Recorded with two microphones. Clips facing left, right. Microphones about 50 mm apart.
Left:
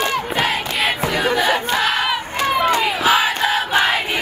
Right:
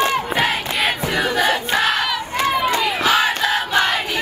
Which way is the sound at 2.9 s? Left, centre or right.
Centre.